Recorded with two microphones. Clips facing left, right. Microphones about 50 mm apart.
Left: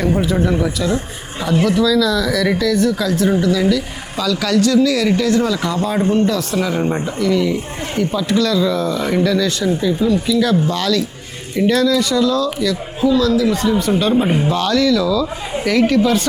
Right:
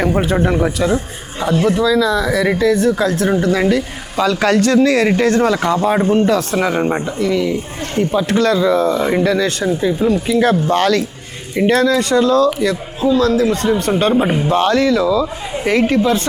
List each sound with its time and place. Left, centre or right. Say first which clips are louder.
0.0 s speech: right 1 dB; right
14.1 s speech: even; centre
14.5 s speech: right 4 dB; right